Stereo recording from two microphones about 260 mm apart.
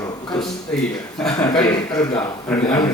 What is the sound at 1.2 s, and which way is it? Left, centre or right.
Speech, centre.